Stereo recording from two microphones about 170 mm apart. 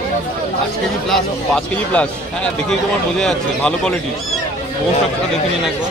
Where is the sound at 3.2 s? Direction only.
5° left (ahead or behind).